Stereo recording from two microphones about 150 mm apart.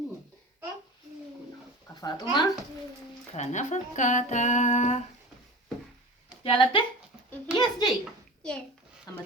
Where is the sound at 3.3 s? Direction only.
50° left (ahead or behind).